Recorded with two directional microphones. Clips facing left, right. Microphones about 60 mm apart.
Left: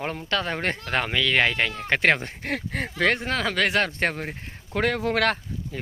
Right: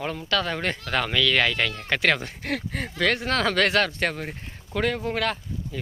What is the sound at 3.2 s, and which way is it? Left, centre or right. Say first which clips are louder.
Speech: right 2 dB; centre.